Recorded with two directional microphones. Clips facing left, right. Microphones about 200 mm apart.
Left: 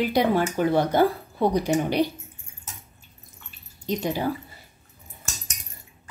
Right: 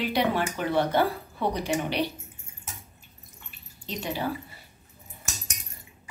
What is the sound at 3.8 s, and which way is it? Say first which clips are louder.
Speech: left 6 dB; 45° left (ahead or behind).